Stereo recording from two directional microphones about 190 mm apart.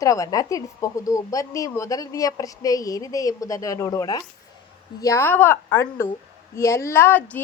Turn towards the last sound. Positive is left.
turn(degrees=10)  # may be behind; listen again after turning